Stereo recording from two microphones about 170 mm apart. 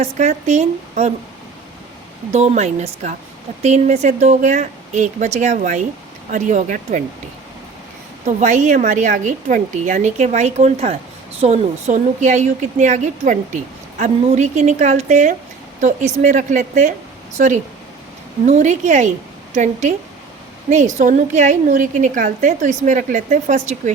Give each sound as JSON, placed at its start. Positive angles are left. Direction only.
{"t": 0.0, "sound": "a woman's voice", "side_deg": -40}
{"t": 2.3, "sound": "a woman's voice", "side_deg": -40}
{"t": 8.4, "sound": "a woman's voice", "side_deg": -45}